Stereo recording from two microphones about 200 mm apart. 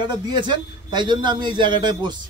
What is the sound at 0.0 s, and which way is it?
Speech, 20° right (ahead or behind).